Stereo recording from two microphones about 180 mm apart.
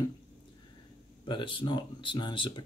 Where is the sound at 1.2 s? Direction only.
25° left (ahead or behind).